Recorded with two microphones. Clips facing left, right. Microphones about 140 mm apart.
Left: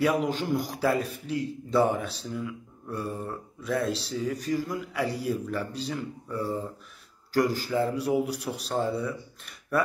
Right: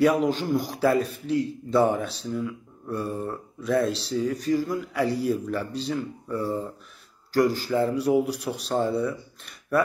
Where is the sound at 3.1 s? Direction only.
Centre (ahead or behind).